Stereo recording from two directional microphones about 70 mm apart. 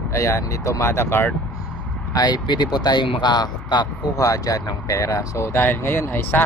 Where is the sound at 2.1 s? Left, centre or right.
Left.